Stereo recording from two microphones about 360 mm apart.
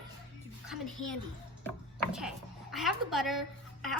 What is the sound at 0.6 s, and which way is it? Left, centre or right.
A woman's voice, centre.